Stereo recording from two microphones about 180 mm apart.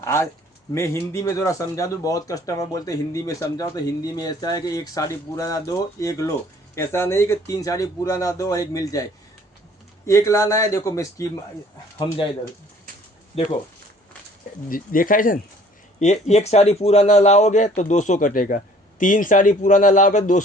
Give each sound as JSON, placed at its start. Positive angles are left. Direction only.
{"t": 0.0, "sound": "speech", "side_deg": 15}
{"t": 10.1, "sound": "a man's voice", "side_deg": 15}
{"t": 13.3, "sound": "speech", "side_deg": 30}
{"t": 14.7, "sound": "a man's voice", "side_deg": 50}
{"t": 16.0, "sound": "a man's voice", "side_deg": 40}